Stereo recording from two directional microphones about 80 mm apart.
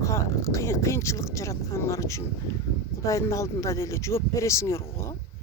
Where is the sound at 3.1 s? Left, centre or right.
Left.